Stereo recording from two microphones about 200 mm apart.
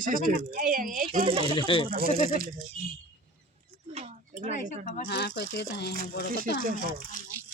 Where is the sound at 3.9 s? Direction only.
30° right (ahead or behind).